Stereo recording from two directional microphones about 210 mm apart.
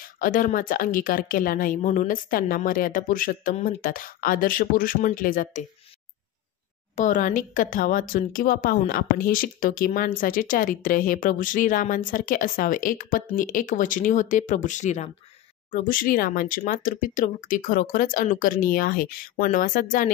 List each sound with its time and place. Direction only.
0.0 s speech: 40° left (ahead or behind)
7.0 s speech: 40° left (ahead or behind)